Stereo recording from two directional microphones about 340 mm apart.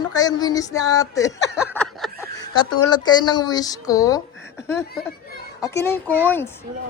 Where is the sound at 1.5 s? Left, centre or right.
Centre.